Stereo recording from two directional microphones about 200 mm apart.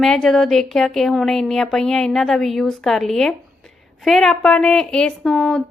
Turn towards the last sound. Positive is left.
turn(degrees=0)  # may be behind; listen again after turning